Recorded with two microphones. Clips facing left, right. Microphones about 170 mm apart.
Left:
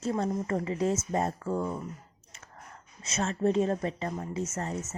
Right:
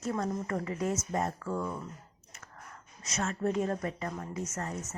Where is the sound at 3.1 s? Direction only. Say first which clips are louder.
Left 4 dB; 25° left (ahead or behind).